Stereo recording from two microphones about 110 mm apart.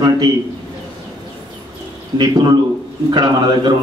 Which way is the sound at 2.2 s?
40° right (ahead or behind).